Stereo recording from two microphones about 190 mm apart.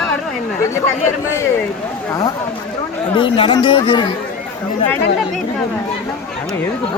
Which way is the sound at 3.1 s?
25° left (ahead or behind).